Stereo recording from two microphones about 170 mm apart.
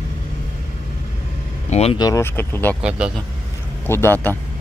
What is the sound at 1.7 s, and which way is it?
Speech, 35° left (ahead or behind).